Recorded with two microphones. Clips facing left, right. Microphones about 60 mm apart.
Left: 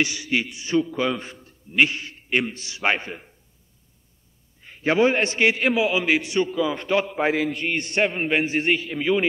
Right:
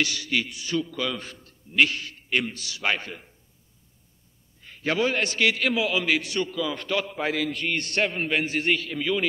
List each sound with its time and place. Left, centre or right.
0.0 s a man's voice: left
4.6 s a man's voice: centre